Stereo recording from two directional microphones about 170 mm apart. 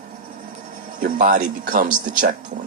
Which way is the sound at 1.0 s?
50° right (ahead or behind).